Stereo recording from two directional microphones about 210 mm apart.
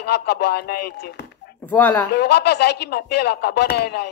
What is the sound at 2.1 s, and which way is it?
A man's voice, 50° left (ahead or behind).